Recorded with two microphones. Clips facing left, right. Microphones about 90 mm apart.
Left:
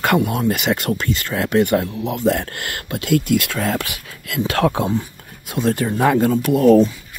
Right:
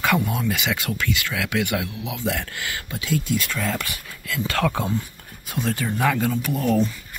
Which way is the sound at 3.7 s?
90° left.